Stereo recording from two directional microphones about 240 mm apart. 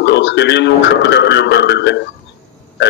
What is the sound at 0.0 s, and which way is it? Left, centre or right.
A man's voice, left.